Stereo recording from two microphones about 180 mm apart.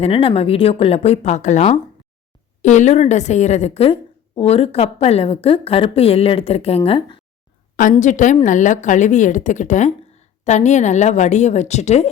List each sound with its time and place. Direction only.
0.0 s a woman's voice: 30° left (ahead or behind)
7.8 s a woman's voice: 45° left (ahead or behind)